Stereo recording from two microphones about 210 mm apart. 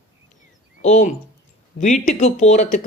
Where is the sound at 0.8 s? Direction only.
35° left (ahead or behind).